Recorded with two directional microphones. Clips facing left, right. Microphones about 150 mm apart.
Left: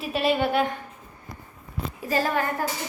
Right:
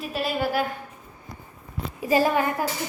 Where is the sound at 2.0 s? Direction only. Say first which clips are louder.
Right 4 dB; 15° right (ahead or behind).